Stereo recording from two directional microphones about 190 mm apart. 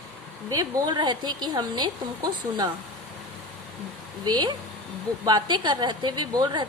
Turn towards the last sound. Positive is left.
turn(degrees=-25)  # may be behind; listen again after turning